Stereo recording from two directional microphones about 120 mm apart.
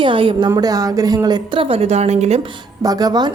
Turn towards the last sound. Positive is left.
turn(degrees=-35)  # may be behind; listen again after turning